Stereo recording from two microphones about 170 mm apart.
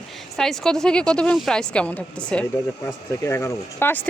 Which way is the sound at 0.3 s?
5° left (ahead or behind).